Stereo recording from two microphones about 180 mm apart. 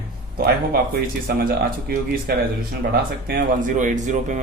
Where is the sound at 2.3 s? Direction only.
60° right (ahead or behind).